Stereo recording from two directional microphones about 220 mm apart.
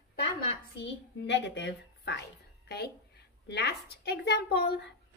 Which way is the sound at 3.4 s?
50° left (ahead or behind).